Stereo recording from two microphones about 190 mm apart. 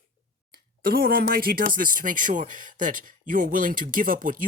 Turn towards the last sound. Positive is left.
turn(degrees=-45)  # may be behind; listen again after turning